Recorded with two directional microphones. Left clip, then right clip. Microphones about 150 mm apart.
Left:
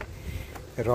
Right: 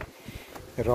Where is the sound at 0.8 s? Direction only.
10° right (ahead or behind).